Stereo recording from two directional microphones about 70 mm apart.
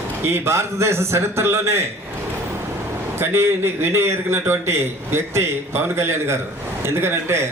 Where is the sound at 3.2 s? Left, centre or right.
Right.